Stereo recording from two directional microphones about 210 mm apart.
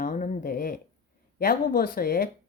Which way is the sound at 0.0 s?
40° left (ahead or behind).